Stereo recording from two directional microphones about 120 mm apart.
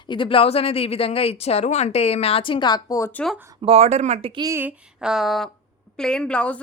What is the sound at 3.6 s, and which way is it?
Speech, 60° right (ahead or behind).